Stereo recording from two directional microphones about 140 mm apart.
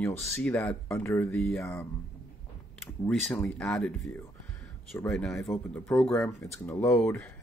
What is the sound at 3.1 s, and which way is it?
Speech, 5° left (ahead or behind).